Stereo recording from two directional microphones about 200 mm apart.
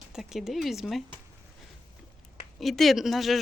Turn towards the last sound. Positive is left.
turn(degrees=0)  # may be behind; listen again after turning